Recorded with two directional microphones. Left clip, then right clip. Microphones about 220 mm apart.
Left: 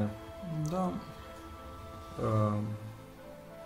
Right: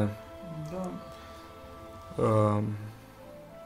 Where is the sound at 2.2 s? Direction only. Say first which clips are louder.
Right 6 dB; 45° right (ahead or behind).